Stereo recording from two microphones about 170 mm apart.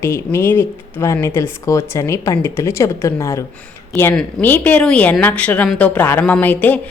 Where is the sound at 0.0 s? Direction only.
15° left (ahead or behind).